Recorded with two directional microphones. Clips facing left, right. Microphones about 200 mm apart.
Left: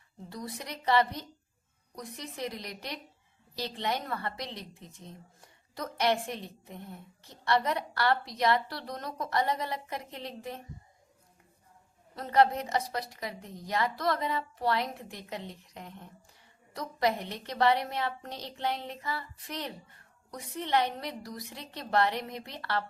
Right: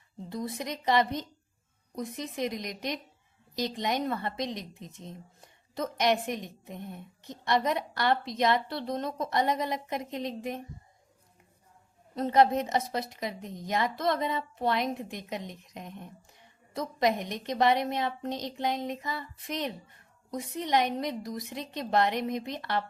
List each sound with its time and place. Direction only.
0.3 s a woman's voice: 25° right (ahead or behind)
12.1 s a woman's voice: 20° right (ahead or behind)